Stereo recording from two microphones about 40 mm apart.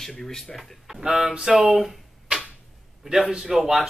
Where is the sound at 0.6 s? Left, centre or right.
Centre.